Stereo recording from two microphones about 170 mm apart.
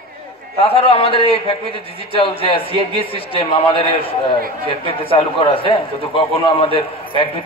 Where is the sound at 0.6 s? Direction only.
35° left (ahead or behind).